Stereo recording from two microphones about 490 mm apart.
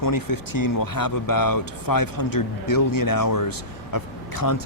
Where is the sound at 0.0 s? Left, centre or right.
Left.